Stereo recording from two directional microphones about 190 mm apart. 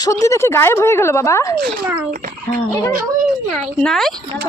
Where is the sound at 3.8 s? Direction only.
Centre (ahead or behind).